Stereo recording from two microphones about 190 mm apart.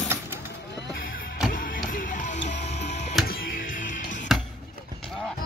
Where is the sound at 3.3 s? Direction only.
50° left (ahead or behind).